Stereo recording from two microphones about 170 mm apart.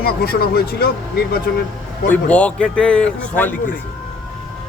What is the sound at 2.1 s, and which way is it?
A man's voice, 5° left (ahead or behind).